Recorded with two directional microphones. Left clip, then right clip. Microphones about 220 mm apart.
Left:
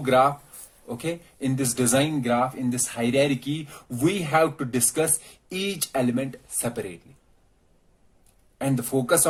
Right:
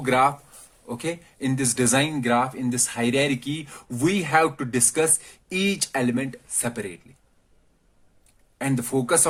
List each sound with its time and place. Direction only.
0.0 s speech: 30° right (ahead or behind)
8.5 s speech: 35° right (ahead or behind)